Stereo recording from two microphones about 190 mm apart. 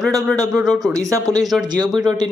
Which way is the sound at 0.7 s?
5° left (ahead or behind).